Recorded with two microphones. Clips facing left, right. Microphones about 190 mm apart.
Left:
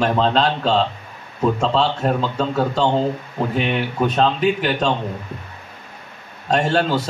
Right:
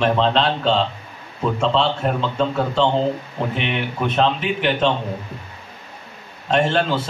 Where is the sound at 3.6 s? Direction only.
40° left (ahead or behind).